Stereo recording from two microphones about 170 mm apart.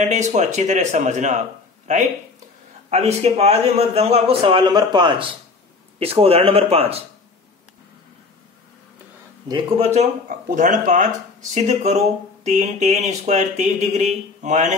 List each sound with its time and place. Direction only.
0.0 s speech: 45° right (ahead or behind)
2.9 s a man's voice: 40° right (ahead or behind)
9.8 s a man's voice: 40° right (ahead or behind)